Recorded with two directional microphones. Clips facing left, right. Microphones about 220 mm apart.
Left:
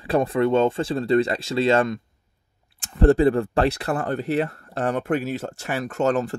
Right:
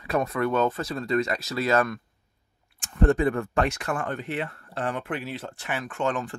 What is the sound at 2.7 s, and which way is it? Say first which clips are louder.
Speech: left 5 dB; 35° left (ahead or behind).